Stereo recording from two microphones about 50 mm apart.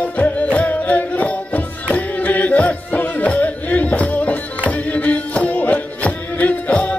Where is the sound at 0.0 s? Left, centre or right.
Left.